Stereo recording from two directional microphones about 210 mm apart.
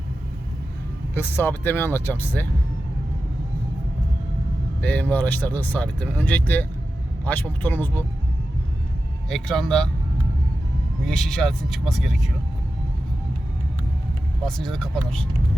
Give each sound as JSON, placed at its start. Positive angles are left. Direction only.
{"t": 1.1, "sound": "speech", "side_deg": 10}
{"t": 4.8, "sound": "speech", "side_deg": 5}
{"t": 9.3, "sound": "speech", "side_deg": 0}
{"t": 11.0, "sound": "speech", "side_deg": 5}
{"t": 14.4, "sound": "speech", "side_deg": 0}